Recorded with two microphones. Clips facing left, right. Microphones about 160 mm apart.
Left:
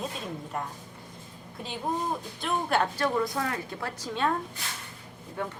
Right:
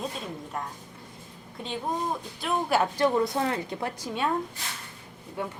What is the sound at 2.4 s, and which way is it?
Speech, 5° right (ahead or behind).